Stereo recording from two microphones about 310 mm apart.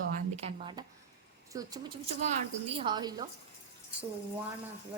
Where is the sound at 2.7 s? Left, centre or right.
Centre.